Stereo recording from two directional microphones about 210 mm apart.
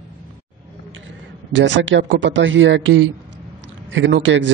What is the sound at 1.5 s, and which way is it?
A man's voice, 60° right (ahead or behind).